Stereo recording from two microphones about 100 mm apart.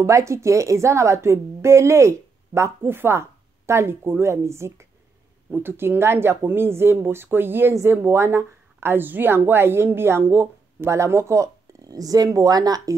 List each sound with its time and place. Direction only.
0.0 s a woman's voice: 30° right (ahead or behind)